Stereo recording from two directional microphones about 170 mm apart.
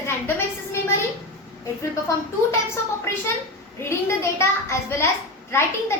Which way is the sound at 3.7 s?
15° left (ahead or behind).